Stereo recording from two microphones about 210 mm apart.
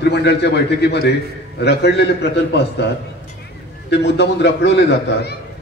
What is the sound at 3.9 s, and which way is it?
A man's voice, 55° left (ahead or behind).